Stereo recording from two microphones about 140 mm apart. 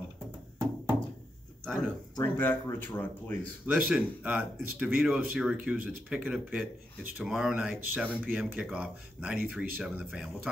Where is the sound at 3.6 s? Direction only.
10° right (ahead or behind).